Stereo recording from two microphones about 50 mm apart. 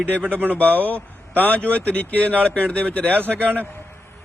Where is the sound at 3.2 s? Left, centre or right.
Right.